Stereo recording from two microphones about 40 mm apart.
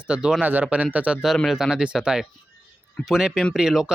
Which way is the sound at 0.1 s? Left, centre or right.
Right.